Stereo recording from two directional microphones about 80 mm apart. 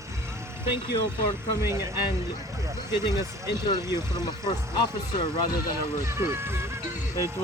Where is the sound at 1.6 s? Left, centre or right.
Right.